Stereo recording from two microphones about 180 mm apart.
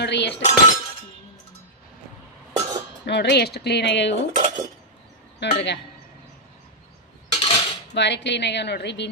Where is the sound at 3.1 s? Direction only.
70° left (ahead or behind).